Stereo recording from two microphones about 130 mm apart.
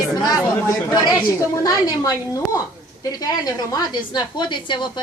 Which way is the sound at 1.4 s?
30° left (ahead or behind).